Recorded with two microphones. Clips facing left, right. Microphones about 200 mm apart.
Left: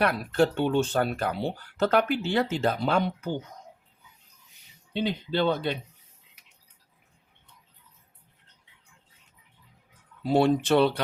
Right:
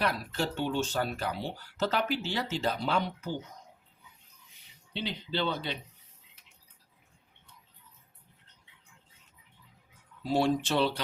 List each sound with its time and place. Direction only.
0.0 s speech: 55° left (ahead or behind)
4.9 s speech: 50° left (ahead or behind)
10.2 s speech: 60° left (ahead or behind)